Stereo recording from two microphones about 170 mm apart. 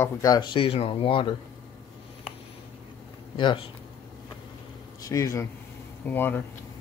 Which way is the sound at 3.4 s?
30° left (ahead or behind).